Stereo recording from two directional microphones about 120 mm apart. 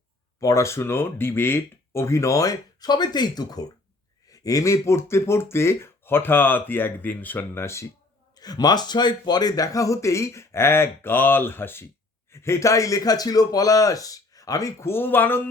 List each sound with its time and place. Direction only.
0.3 s speech: 25° left (ahead or behind)
8.4 s speech: 35° left (ahead or behind); by 15.4 s 15° left (ahead or behind)